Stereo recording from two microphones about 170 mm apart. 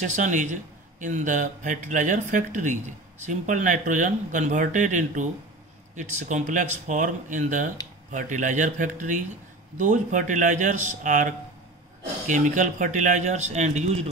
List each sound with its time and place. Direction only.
0.0 s a man's voice: 45° right (ahead or behind)